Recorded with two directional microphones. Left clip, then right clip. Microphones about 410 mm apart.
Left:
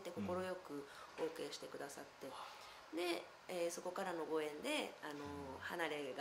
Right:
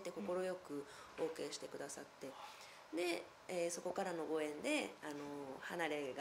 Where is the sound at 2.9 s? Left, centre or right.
Centre.